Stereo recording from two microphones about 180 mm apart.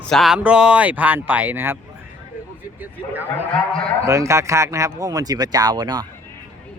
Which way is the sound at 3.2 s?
10° left (ahead or behind).